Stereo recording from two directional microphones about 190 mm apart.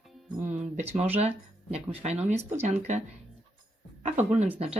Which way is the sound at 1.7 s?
35° right (ahead or behind).